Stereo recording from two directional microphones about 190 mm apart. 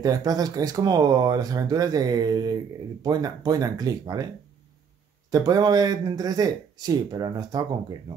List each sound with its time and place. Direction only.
0.0 s speech: 20° right (ahead or behind)
5.3 s speech: 20° right (ahead or behind)